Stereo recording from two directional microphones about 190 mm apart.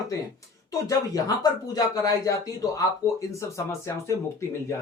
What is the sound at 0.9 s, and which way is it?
Speech, 20° left (ahead or behind).